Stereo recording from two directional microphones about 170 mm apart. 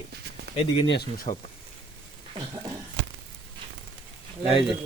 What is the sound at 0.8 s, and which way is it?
Speech, 90° left.